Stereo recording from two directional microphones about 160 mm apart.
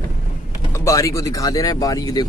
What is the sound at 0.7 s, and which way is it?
Speech, 20° left (ahead or behind).